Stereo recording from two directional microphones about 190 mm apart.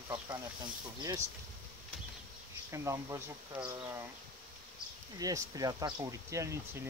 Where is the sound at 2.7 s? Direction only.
15° right (ahead or behind).